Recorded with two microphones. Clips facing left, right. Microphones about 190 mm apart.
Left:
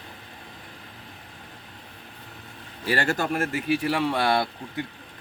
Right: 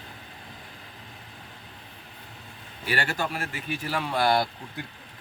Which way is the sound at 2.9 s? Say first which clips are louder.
Left 4 dB; 45° left (ahead or behind).